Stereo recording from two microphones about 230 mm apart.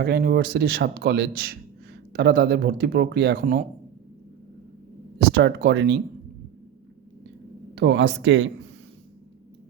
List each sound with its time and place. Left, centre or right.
0.0 s a man's voice: right
5.2 s speech: right
7.8 s a man's voice: right